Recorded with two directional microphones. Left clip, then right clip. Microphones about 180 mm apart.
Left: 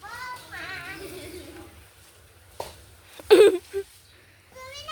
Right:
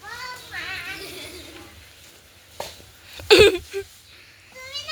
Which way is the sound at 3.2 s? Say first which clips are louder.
Right 2 dB; 10° left (ahead or behind).